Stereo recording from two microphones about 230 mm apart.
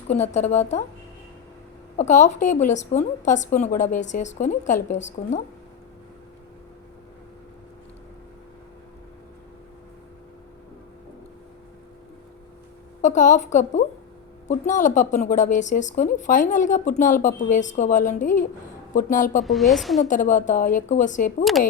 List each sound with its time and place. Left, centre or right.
0.1 s a woman's voice: left
2.0 s speech: left
13.0 s speech: left
19.5 s a woman's voice: centre
20.0 s speech: left